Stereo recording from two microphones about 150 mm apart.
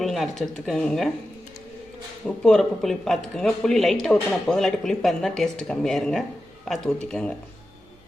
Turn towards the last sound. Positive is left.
turn(degrees=5)  # may be behind; listen again after turning